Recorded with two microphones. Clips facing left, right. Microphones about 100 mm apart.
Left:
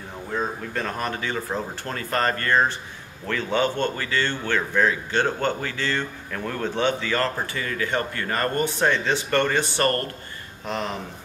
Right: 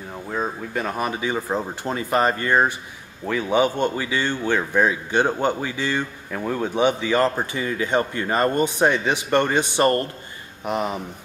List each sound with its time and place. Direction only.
0.3 s speech: 10° right (ahead or behind)